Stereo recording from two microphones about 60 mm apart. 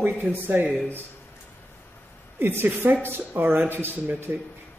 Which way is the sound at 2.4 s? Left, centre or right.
Right.